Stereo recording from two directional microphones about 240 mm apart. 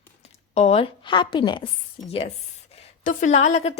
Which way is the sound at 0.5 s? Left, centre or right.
Left.